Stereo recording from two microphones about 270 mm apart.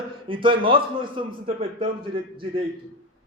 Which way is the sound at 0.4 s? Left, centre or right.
Centre.